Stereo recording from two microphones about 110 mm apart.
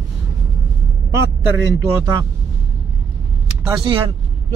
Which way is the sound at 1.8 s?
30° right (ahead or behind).